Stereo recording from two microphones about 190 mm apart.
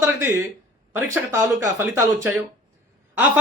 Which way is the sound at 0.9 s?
10° right (ahead or behind).